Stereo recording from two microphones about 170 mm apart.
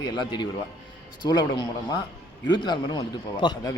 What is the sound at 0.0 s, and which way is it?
A man's voice, 25° left (ahead or behind).